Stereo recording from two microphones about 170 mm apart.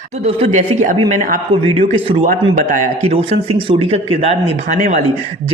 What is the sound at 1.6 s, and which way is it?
Speech, 35° right (ahead or behind).